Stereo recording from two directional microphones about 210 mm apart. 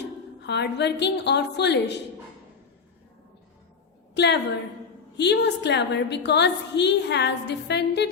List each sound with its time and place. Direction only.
0.0 s a woman's voice: 55° left (ahead or behind)
4.1 s a woman's voice: 55° left (ahead or behind)